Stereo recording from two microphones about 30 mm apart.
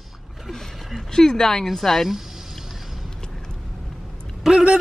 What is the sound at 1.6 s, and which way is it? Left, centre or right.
Speech, centre.